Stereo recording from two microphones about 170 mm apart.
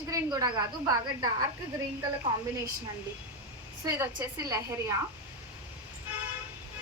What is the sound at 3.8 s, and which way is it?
A woman's voice, 20° right (ahead or behind).